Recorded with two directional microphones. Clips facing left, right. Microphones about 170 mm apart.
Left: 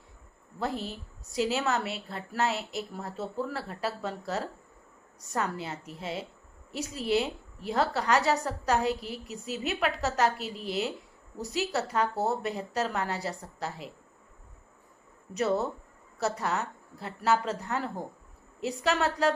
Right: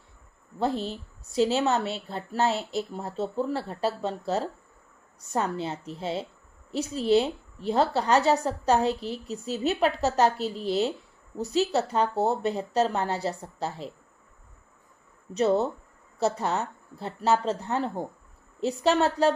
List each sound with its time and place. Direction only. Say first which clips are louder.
0.6 s a woman's voice: right 5 dB; 30° right (ahead or behind)
15.3 s a woman's voice: right 5 dB; 25° right (ahead or behind)